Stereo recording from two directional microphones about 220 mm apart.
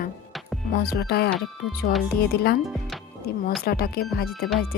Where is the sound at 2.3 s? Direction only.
45° left (ahead or behind).